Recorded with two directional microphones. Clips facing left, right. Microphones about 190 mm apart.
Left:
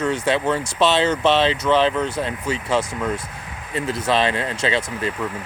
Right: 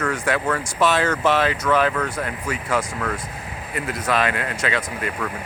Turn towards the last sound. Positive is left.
turn(degrees=25)  # may be behind; listen again after turning